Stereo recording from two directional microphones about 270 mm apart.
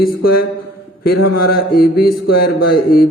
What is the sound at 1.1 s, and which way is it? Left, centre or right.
Speech, left.